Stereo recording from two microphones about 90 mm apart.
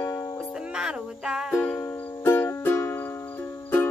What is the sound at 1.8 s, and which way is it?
Music, 25° left (ahead or behind).